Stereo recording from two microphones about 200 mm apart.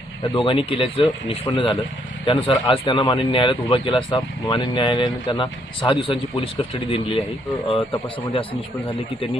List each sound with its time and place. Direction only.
0.3 s speech: 25° left (ahead or behind)